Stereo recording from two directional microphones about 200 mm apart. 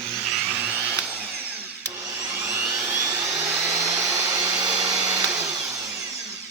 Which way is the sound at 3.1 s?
15° right (ahead or behind).